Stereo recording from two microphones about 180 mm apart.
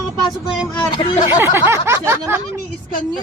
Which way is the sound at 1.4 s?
15° right (ahead or behind).